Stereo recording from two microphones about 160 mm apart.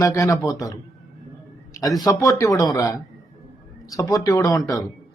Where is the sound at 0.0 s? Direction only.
20° left (ahead or behind).